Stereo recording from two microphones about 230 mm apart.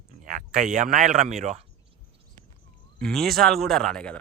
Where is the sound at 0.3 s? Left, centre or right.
Right.